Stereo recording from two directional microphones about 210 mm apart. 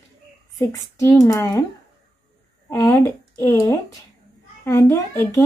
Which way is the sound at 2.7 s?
15° left (ahead or behind).